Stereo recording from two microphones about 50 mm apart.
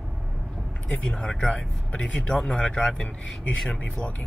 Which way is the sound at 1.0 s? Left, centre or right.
Centre.